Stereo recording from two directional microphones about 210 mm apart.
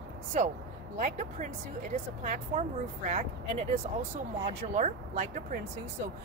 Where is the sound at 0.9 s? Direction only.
35° right (ahead or behind).